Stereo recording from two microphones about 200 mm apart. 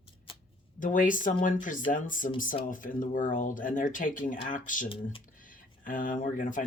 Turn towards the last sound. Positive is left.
turn(degrees=40)  # may be behind; listen again after turning